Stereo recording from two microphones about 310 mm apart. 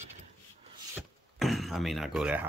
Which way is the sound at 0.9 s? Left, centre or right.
Centre.